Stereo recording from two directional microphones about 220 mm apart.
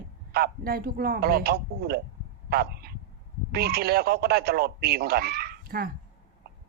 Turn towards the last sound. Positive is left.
turn(degrees=-45)  # may be behind; listen again after turning